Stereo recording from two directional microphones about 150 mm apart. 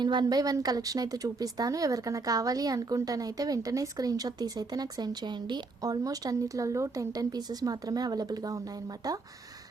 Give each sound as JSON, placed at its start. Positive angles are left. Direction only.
{"t": 0.0, "sound": "a woman's voice", "side_deg": -30}